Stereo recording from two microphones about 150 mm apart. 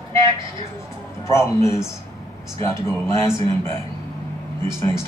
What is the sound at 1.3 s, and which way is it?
Speech, 20° left (ahead or behind).